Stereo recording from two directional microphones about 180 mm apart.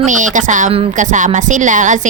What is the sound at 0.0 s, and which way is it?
Speech, 45° right (ahead or behind).